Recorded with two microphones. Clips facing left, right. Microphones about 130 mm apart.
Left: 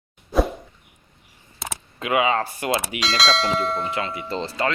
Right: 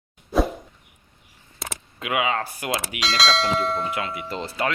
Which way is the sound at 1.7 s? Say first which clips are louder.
Left 4 dB; 5° right (ahead or behind).